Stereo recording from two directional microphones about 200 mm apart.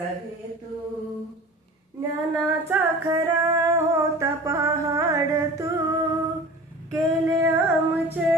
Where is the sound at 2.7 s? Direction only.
15° right (ahead or behind).